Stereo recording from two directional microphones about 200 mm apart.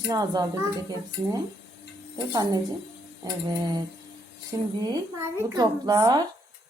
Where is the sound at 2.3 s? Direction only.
20° right (ahead or behind).